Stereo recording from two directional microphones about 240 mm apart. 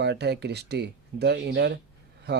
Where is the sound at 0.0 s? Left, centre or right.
Right.